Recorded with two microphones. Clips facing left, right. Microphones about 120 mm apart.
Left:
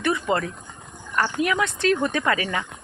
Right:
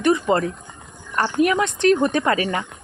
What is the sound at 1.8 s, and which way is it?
Speech, 20° right (ahead or behind).